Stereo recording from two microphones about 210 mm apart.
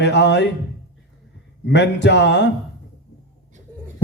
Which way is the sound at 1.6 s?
55° left (ahead or behind).